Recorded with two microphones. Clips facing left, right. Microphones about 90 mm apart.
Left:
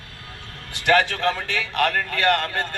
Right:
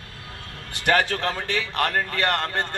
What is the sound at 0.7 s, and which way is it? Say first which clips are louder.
A man's voice: left 2 dB; 40° right (ahead or behind).